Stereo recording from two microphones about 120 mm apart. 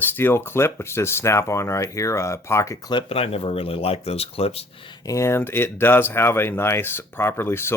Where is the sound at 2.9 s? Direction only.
50° left (ahead or behind).